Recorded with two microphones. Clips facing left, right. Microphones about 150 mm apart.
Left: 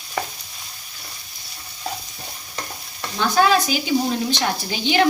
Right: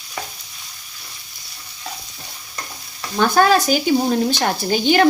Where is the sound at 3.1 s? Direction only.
50° right (ahead or behind).